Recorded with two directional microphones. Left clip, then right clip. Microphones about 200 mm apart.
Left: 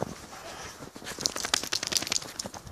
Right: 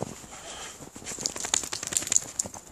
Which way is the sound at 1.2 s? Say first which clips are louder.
Left 2 dB; 40° left (ahead or behind).